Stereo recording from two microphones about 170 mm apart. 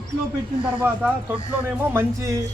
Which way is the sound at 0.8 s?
10° right (ahead or behind).